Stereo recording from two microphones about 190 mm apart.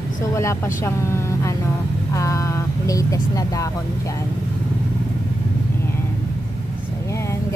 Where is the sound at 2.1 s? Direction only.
15° left (ahead or behind).